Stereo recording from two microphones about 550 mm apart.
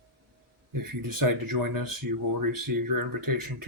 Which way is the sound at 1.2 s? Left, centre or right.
Right.